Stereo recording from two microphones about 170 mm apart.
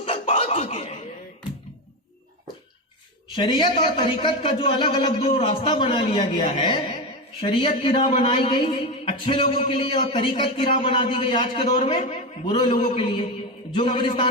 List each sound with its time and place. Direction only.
0.0 s a sound: 35° left (ahead or behind)
3.3 s a man's voice: 25° left (ahead or behind)
11.9 s a man's voice: 45° left (ahead or behind)
12.5 s a man's voice: 30° left (ahead or behind)